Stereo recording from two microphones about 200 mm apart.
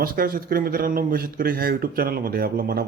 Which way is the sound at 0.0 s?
45° right (ahead or behind).